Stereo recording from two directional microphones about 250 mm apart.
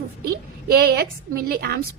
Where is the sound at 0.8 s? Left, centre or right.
Right.